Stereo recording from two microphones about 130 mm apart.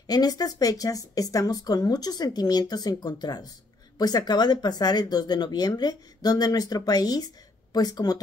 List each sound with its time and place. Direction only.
0.0 s speech: 30° left (ahead or behind)